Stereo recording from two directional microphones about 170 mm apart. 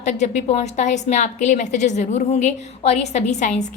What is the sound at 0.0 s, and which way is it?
A woman's voice, 40° left (ahead or behind).